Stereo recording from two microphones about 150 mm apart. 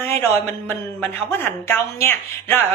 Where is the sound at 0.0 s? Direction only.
15° left (ahead or behind).